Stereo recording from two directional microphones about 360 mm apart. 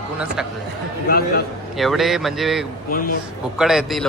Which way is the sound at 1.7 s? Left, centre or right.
Centre.